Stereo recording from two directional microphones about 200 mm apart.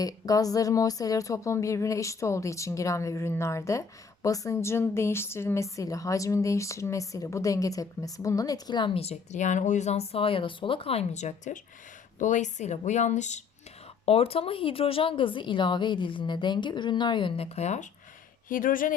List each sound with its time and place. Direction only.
0.0 s speech: 20° left (ahead or behind); by 18.9 s 45° left (ahead or behind)